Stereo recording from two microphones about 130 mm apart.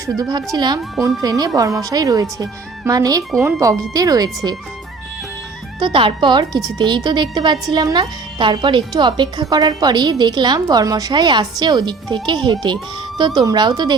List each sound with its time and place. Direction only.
0.0 s a woman's voice: 30° right (ahead or behind)
5.8 s a woman's voice: 40° right (ahead or behind)